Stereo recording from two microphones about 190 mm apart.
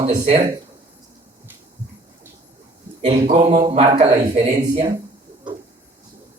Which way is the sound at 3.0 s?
35° right (ahead or behind).